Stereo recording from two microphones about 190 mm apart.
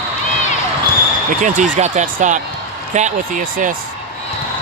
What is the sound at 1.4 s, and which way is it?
Speech, 45° right (ahead or behind).